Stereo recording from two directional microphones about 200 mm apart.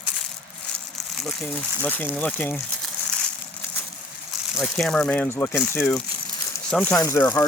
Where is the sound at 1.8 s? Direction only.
10° left (ahead or behind).